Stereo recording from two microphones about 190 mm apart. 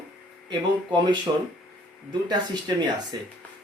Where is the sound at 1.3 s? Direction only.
25° right (ahead or behind).